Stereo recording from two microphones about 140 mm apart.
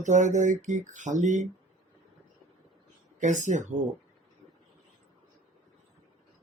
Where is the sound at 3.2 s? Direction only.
60° right (ahead or behind).